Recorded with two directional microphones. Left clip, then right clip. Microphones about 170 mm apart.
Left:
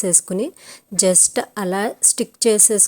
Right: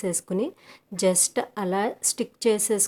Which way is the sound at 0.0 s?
25° left (ahead or behind).